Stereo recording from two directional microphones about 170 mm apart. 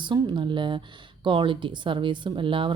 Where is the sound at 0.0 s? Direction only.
25° right (ahead or behind).